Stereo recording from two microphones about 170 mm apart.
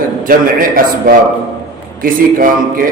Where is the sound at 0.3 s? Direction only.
55° right (ahead or behind).